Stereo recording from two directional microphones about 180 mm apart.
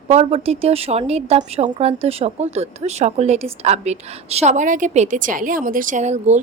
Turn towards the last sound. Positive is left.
turn(degrees=-40)  # may be behind; listen again after turning